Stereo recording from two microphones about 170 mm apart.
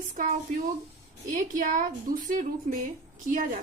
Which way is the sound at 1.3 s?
50° right (ahead or behind).